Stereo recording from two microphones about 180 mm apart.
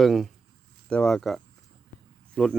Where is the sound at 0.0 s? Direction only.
Centre (ahead or behind).